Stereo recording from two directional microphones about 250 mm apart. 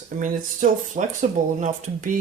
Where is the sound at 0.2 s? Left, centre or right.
Right.